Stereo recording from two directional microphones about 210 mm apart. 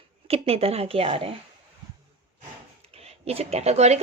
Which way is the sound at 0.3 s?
30° right (ahead or behind).